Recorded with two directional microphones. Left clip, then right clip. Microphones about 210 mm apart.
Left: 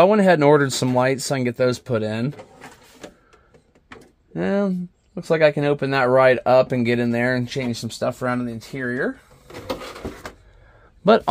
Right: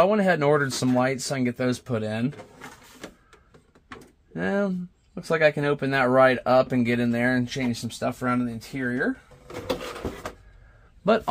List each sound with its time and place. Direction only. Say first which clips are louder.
0.0 s speech: left 6 dB; 45° left (ahead or behind)
4.3 s speech: left 4 dB; 35° left (ahead or behind)